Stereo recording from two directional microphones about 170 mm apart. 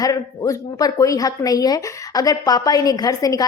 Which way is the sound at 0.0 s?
20° left (ahead or behind).